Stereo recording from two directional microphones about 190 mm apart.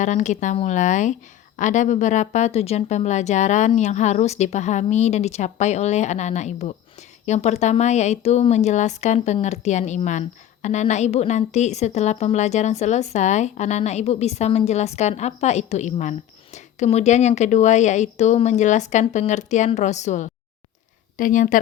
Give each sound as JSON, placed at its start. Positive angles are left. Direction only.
{"t": 0.0, "sound": "a woman's voice", "side_deg": 40}